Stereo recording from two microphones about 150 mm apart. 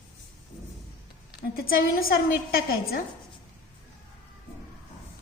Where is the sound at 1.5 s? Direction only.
85° left.